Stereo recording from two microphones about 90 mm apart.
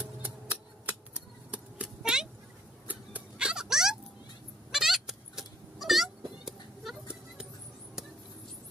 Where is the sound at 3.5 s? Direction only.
5° right (ahead or behind).